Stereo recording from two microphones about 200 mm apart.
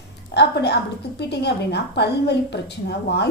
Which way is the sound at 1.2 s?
55° left (ahead or behind).